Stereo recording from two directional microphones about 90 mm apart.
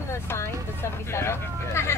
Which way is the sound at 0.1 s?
30° left (ahead or behind).